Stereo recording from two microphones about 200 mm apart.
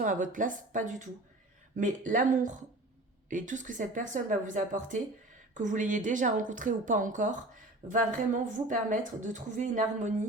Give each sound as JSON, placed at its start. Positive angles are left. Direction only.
{"t": 0.0, "sound": "a woman's voice", "side_deg": -40}